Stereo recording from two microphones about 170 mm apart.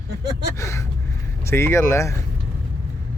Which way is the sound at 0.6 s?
15° left (ahead or behind).